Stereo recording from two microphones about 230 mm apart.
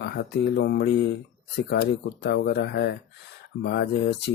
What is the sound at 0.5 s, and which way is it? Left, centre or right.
Speech, left.